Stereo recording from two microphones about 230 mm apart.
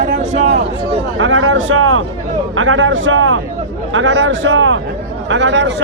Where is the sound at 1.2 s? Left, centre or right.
Right.